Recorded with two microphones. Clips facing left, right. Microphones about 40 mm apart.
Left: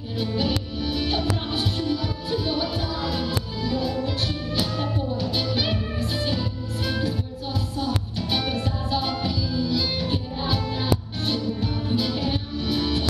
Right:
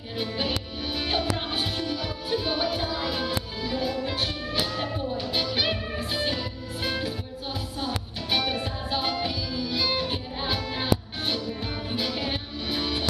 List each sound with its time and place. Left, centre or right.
0.2 s music: centre